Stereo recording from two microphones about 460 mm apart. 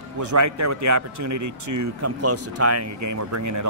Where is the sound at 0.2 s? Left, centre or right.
Right.